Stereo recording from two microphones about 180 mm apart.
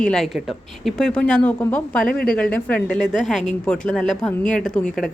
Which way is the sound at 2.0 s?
50° left (ahead or behind).